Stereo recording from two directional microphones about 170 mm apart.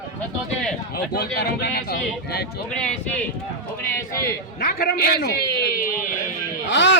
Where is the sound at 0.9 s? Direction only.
65° left (ahead or behind).